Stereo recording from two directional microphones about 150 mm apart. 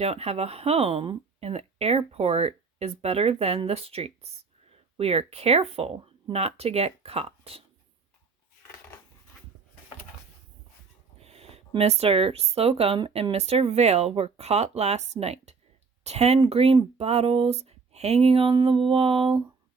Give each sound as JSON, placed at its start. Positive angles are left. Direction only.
{"t": 0.0, "sound": "speech", "side_deg": -45}
{"t": 11.2, "sound": "speech", "side_deg": -45}